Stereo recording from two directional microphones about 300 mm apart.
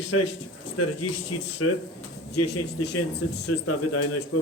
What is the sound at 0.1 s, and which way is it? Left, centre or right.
A man's voice, left.